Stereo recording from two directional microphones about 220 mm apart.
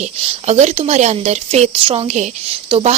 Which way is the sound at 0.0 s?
30° right (ahead or behind).